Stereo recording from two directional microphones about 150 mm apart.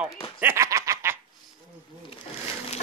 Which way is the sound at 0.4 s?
15° right (ahead or behind).